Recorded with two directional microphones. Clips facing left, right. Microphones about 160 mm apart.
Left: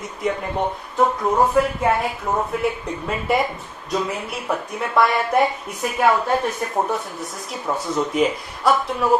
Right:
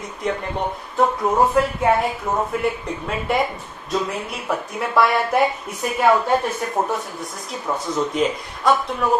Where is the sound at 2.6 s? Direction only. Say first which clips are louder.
Even; centre (ahead or behind).